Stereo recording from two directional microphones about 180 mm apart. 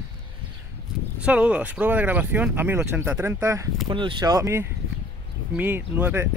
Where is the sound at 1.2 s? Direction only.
5° right (ahead or behind).